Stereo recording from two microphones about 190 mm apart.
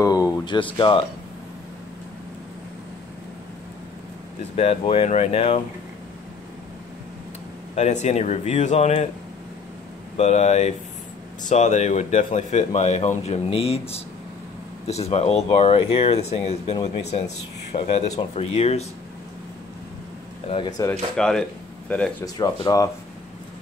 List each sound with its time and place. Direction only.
0.0 s speech: 20° left (ahead or behind)
4.6 s speech: 30° left (ahead or behind)
7.7 s speech: 35° left (ahead or behind)
10.1 s speech: 35° left (ahead or behind)
14.9 s speech: 35° left (ahead or behind)
20.4 s speech: 25° left (ahead or behind)
21.2 s speech: 5° left (ahead or behind)
22.2 s speech: 20° left (ahead or behind)